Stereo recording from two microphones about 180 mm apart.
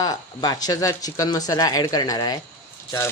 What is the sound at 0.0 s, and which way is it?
Speech, 20° left (ahead or behind).